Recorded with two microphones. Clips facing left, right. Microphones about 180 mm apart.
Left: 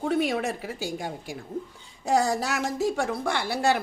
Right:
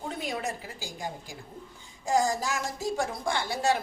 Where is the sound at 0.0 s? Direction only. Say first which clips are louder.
Left 8 dB; 70° left (ahead or behind).